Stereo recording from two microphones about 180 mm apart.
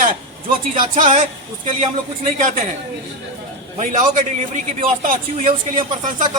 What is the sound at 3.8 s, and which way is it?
A man's voice, 45° right (ahead or behind).